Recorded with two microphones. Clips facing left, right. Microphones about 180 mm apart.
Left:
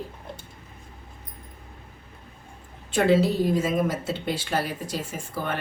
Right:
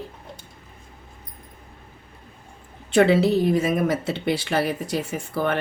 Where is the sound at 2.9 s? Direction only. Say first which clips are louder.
Right 3 dB; 70° right (ahead or behind).